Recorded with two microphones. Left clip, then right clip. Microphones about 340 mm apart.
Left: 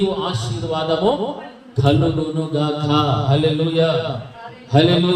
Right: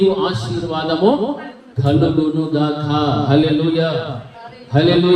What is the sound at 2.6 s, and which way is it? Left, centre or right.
Speech, left.